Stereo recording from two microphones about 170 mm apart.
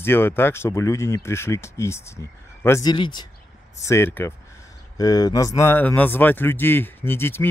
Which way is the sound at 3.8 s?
15° left (ahead or behind).